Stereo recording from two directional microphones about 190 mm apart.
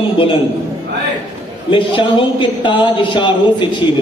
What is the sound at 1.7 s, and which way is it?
Speech, 25° left (ahead or behind).